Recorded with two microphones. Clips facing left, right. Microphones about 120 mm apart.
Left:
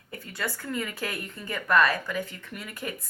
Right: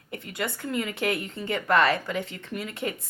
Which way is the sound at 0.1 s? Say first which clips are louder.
Right 2 dB; 20° right (ahead or behind).